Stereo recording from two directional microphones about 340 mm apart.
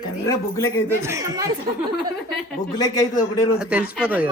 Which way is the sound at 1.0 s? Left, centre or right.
Centre.